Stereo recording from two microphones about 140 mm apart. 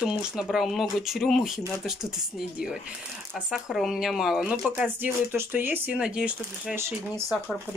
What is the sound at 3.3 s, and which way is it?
Speech, centre (ahead or behind).